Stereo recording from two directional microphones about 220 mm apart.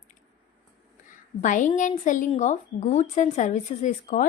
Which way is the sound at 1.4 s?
35° left (ahead or behind).